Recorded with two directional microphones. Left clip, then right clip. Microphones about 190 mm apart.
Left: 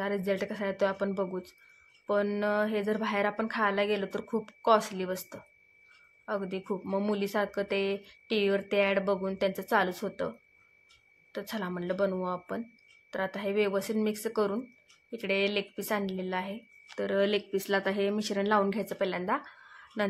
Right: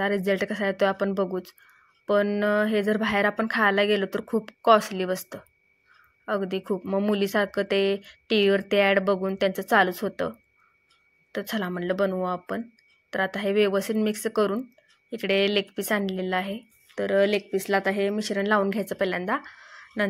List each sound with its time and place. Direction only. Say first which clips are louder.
0.0 s speech: right 6 dB; 25° right (ahead or behind)
11.3 s speech: right 6 dB; 25° right (ahead or behind)